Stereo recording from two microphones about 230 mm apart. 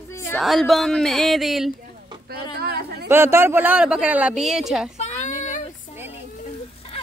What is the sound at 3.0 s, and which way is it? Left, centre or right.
Speech, centre.